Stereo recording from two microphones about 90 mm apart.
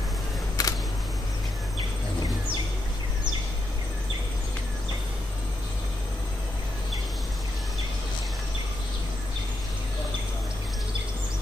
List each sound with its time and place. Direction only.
0.6 s single-lens reflex camera: 45° left (ahead or behind)